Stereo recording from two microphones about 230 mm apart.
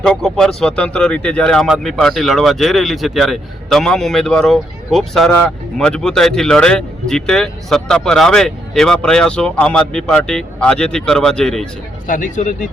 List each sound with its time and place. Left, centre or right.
0.0 s speech: centre
12.0 s speech: left